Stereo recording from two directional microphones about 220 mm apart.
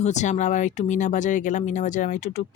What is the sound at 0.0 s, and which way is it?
Speech, 30° left (ahead or behind).